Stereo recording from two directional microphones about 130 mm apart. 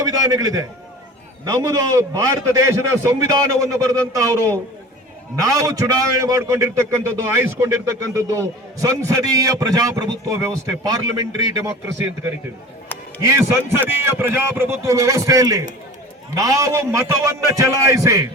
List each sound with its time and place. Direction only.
0.0 s a man's voice: 30° right (ahead or behind)